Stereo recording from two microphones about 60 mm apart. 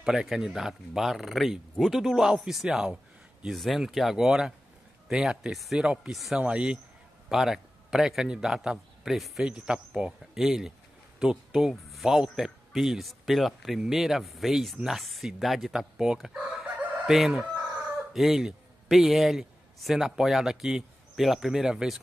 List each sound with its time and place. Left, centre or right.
0.0 s speech: centre
3.5 s speech: centre
7.2 s a man's voice: centre
9.4 s speech: centre
17.0 s chicken: centre
18.1 s a man's voice: centre